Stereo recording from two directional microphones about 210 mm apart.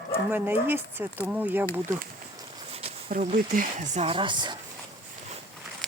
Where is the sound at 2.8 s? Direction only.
35° right (ahead or behind).